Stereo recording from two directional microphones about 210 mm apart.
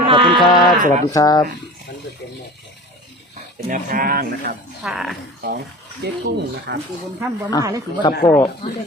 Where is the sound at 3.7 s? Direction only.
40° right (ahead or behind).